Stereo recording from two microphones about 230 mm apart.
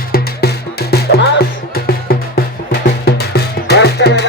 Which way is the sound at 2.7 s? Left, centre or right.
Left.